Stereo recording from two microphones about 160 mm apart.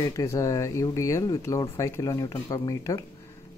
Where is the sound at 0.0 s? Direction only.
20° left (ahead or behind).